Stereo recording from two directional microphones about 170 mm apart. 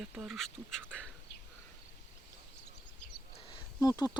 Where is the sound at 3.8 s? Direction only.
20° left (ahead or behind).